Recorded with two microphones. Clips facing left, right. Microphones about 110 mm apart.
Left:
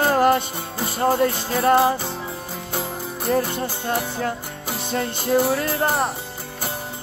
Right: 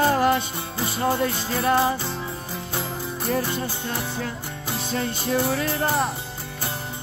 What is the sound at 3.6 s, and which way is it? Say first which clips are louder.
Music: left 4 dB; 45° left (ahead or behind).